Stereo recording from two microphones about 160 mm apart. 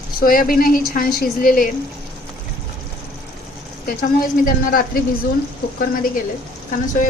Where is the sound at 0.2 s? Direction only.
65° left (ahead or behind).